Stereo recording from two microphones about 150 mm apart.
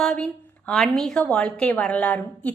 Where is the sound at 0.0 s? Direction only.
5° left (ahead or behind).